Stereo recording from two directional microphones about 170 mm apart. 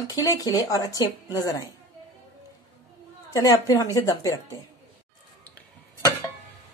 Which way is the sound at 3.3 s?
20° left (ahead or behind).